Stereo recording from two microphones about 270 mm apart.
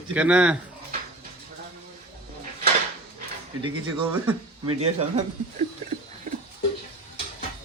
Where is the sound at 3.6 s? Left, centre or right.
Centre.